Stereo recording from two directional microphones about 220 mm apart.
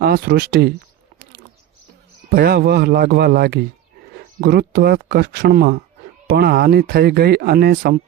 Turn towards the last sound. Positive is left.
turn(degrees=-45)  # may be behind; listen again after turning